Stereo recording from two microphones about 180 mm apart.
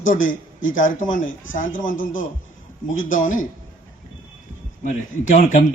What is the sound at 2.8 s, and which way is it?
Speech, 90° left.